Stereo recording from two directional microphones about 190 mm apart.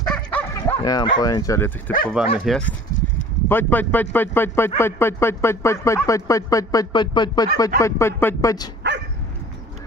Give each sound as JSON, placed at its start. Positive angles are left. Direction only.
{"t": 0.0, "sound": "bow-wow", "side_deg": 5}
{"t": 0.8, "sound": "speech", "side_deg": 20}
{"t": 8.8, "sound": "dog", "side_deg": -65}